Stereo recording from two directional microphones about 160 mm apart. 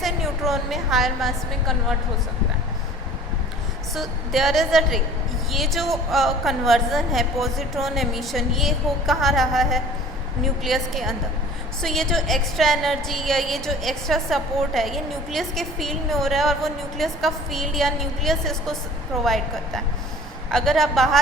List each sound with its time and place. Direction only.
0.0 s a woman's voice: centre (ahead or behind)
3.9 s a woman's voice: centre (ahead or behind)